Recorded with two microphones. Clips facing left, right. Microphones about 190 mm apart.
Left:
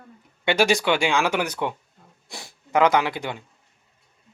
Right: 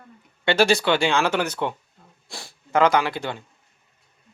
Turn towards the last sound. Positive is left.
turn(degrees=15)  # may be behind; listen again after turning